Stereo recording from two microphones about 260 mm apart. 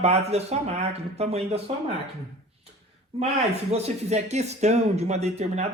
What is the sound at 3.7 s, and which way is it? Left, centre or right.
A woman's voice, right.